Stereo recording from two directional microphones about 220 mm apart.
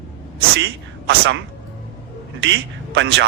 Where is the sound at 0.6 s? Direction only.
50° right (ahead or behind).